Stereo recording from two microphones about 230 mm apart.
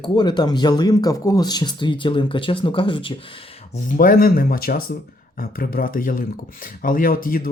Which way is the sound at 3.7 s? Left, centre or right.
Left.